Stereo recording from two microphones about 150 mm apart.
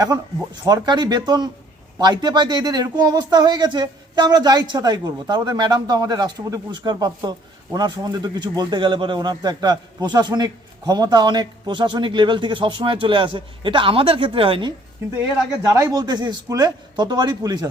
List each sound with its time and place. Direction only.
0.6 s speech: 25° right (ahead or behind)
15.7 s speech: 25° right (ahead or behind)